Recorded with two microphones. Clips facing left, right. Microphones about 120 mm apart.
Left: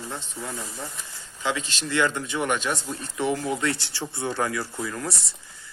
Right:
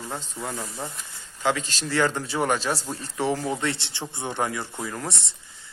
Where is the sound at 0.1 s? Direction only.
45° right (ahead or behind).